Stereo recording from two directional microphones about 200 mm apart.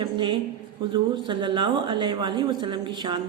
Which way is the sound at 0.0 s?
25° right (ahead or behind).